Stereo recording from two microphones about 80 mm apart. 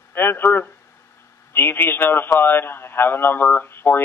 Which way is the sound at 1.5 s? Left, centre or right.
Left.